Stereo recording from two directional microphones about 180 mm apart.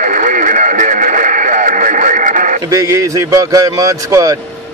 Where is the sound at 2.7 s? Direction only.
20° right (ahead or behind).